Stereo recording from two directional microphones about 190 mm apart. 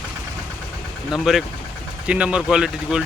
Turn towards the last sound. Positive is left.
turn(degrees=-5)  # may be behind; listen again after turning